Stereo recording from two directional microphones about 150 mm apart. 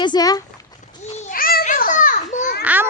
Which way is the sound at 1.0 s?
45° left (ahead or behind).